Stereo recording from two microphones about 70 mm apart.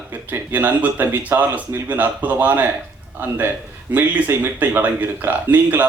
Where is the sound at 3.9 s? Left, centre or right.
Right.